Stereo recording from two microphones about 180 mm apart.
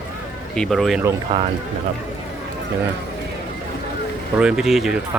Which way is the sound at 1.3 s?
25° right (ahead or behind).